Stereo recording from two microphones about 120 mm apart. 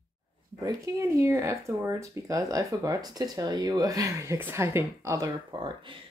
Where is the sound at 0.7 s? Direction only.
25° right (ahead or behind).